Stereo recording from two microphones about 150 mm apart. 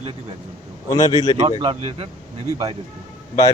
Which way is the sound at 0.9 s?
20° left (ahead or behind).